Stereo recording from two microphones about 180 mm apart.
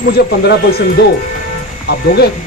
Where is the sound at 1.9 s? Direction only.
60° left (ahead or behind).